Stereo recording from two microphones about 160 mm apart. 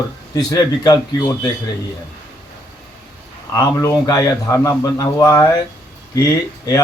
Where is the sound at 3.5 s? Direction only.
20° left (ahead or behind).